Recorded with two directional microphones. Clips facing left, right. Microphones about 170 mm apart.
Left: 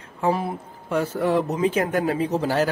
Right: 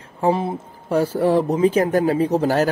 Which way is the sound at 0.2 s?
25° right (ahead or behind).